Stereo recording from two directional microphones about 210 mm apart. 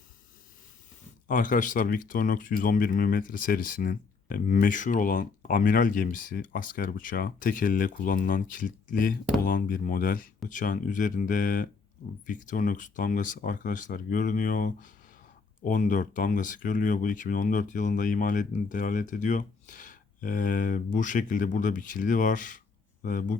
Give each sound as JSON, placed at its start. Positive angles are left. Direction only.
{"t": 1.3, "sound": "speech", "side_deg": 40}